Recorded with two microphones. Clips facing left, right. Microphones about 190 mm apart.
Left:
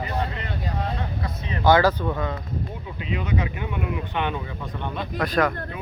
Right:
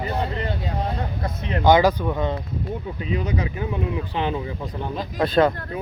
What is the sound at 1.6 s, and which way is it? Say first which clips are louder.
Speech: right 2 dB; 15° right (ahead or behind).